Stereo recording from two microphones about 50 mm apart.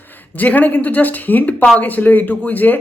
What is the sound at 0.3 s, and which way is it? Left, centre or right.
Speech, left.